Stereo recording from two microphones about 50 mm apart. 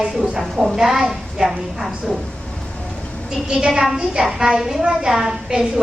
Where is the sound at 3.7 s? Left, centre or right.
Centre.